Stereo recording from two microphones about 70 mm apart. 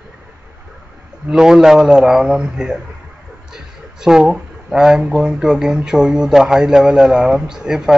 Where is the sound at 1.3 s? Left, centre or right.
Centre.